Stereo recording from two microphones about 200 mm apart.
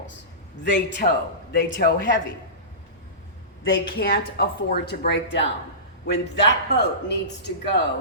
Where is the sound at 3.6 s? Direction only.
50° left (ahead or behind).